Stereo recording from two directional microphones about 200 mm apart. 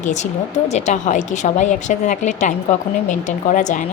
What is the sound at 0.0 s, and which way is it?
Speech, 35° left (ahead or behind).